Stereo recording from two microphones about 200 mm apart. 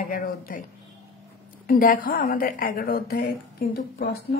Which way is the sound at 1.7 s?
45° left (ahead or behind).